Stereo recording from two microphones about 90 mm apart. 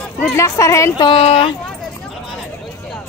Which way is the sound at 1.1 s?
85° left.